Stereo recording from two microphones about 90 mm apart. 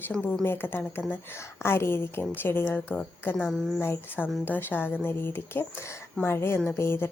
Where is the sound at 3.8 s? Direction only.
25° left (ahead or behind).